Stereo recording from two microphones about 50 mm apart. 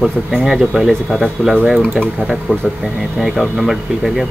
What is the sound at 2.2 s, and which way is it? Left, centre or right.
Speech, right.